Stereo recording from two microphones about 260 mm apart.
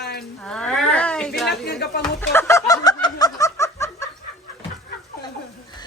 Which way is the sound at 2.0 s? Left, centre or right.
Centre.